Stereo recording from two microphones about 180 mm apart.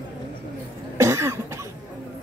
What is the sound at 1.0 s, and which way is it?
Cough, 15° right (ahead or behind).